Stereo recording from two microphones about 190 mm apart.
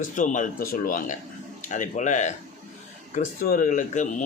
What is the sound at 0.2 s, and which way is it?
A man's voice, 45° left (ahead or behind).